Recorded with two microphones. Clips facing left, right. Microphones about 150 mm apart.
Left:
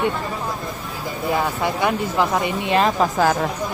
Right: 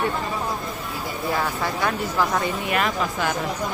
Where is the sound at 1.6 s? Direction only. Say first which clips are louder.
Left 4 dB; 20° left (ahead or behind); by 3.3 s 40° left (ahead or behind).